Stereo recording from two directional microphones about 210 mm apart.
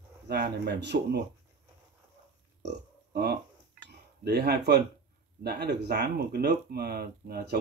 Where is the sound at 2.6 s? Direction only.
50° right (ahead or behind).